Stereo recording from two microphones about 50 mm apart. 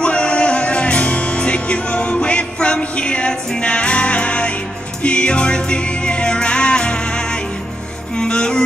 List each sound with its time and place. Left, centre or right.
0.0 s music: left